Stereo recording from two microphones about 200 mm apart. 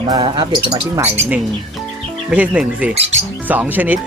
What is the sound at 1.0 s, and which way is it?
Speech, 5° right (ahead or behind).